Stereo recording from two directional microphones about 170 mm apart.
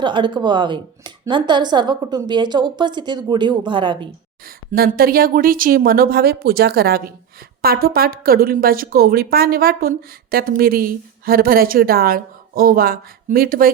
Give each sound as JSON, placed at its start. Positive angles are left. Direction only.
{"t": 0.0, "sound": "speech", "side_deg": -30}
{"t": 4.4, "sound": "a woman's voice", "side_deg": -60}